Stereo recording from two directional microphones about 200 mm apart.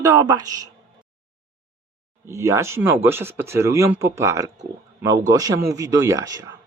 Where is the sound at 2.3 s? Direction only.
15° right (ahead or behind).